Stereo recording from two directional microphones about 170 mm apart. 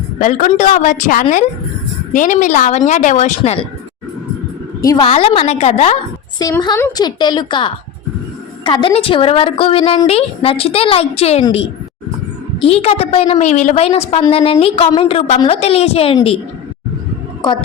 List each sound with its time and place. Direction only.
0.2 s a woman's voice: 45° left (ahead or behind)
4.8 s a woman's voice: 20° left (ahead or behind)
5.0 s a woman's voice: 35° left (ahead or behind)
6.4 s a woman's voice: 25° left (ahead or behind)
7.0 s a woman's voice: 25° left (ahead or behind)
12.6 s a woman's voice: 35° left (ahead or behind)
13.8 s a woman's voice: 35° left (ahead or behind)